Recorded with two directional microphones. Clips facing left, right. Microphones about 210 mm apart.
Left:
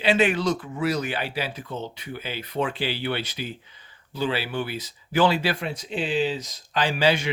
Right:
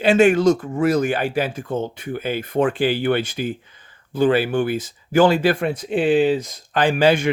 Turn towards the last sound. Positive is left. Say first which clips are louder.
# right 6 dB
turn(degrees=-50)  # may be behind; listen again after turning